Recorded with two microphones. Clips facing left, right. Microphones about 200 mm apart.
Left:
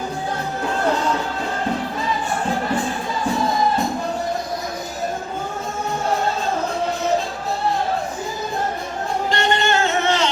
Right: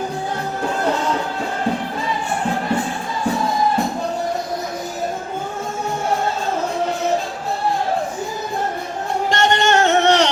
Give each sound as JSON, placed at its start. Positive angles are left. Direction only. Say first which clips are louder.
{"t": 9.3, "sound": "music", "louder": "right 4 dB", "side_deg": -80}